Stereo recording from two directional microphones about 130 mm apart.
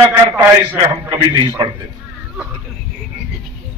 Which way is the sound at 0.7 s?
30° right (ahead or behind).